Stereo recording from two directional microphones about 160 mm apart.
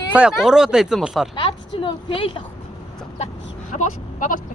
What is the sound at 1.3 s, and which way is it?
Speech, 35° left (ahead or behind).